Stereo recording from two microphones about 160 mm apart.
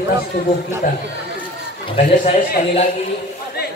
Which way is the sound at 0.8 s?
55° left (ahead or behind).